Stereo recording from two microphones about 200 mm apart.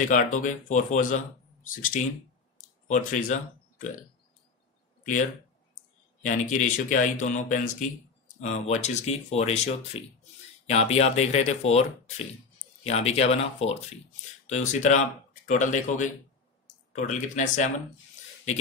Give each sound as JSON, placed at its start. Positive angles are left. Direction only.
{"t": 0.1, "sound": "speech", "side_deg": 40}
{"t": 6.2, "sound": "speech", "side_deg": 40}